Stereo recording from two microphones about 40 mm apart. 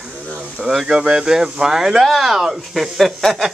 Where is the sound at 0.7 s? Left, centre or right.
Centre.